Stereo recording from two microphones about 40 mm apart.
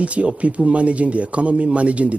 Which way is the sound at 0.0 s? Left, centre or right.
Right.